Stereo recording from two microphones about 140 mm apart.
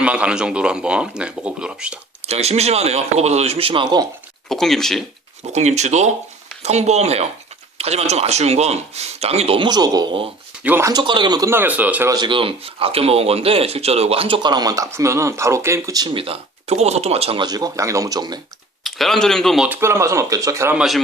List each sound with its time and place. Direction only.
0.0 s speech: 10° right (ahead or behind)
2.2 s speech: 50° right (ahead or behind); by 4.0 s 35° right (ahead or behind)
4.4 s speech: 5° left (ahead or behind)
5.5 s speech: 55° right (ahead or behind); by 10.2 s 30° right (ahead or behind)
10.6 s speech: 15° right (ahead or behind)
10.9 s speech: 35° right (ahead or behind); by 12.1 s 10° right (ahead or behind)
12.1 s speech: 35° right (ahead or behind)
16.1 s speech: 40° right (ahead or behind)
17.4 s speech: 30° right (ahead or behind)
18.9 s speech: centre (ahead or behind)
19.6 s speech: 15° right (ahead or behind)
20.7 s speech: centre (ahead or behind)